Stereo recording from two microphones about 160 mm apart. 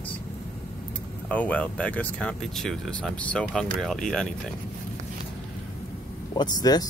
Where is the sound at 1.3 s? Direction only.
10° left (ahead or behind).